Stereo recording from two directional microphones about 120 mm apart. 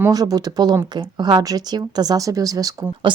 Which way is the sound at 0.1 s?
30° right (ahead or behind).